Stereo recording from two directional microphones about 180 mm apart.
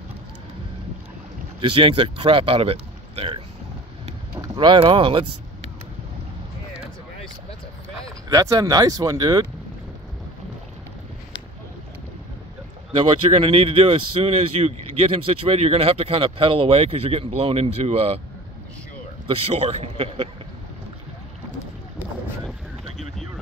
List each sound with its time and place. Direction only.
1.6 s speech: 30° right (ahead or behind)
8.3 s speech: 20° right (ahead or behind)
12.9 s speech: 30° right (ahead or behind)
19.2 s speech: 30° right (ahead or behind)